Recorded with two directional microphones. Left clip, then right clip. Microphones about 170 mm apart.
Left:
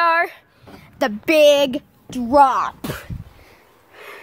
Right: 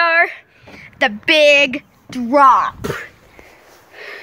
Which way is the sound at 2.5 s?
5° right (ahead or behind).